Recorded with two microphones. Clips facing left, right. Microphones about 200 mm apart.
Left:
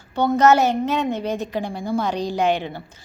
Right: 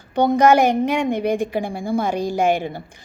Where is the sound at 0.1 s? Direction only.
15° right (ahead or behind).